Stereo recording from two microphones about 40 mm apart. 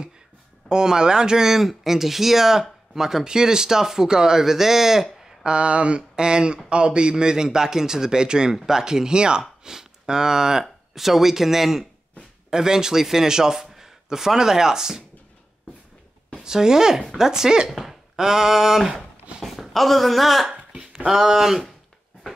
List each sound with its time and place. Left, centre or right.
0.7 s speech: centre
5.4 s a man's voice: right
16.4 s speech: centre
17.6 s speech: centre
18.1 s speech: centre
19.4 s speech: centre